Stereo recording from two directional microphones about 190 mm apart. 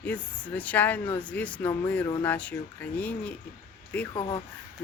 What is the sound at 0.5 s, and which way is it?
Speech, 10° left (ahead or behind).